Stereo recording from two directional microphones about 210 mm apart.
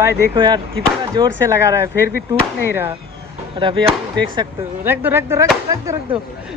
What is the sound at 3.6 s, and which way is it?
Speech, 25° right (ahead or behind).